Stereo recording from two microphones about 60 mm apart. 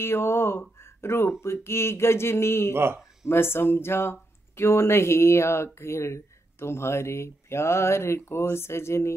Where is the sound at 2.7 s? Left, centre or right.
Right.